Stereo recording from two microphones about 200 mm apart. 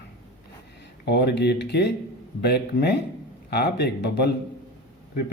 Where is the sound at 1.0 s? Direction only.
55° left (ahead or behind).